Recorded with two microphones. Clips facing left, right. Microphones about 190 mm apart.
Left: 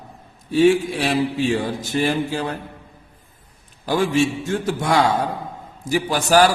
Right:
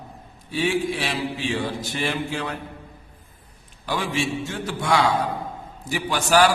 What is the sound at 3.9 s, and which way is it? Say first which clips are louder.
Mantra: left 7 dB; 45° left (ahead or behind).